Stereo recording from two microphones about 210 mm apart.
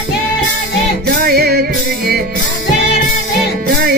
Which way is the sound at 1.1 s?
45° right (ahead or behind).